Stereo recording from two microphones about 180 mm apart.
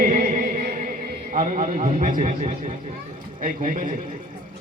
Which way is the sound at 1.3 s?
45° right (ahead or behind).